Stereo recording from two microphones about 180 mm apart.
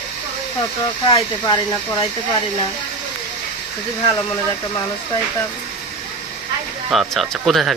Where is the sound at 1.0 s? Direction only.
30° left (ahead or behind).